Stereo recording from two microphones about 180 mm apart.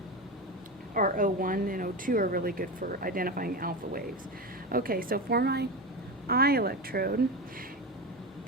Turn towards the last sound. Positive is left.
turn(degrees=-55)  # may be behind; listen again after turning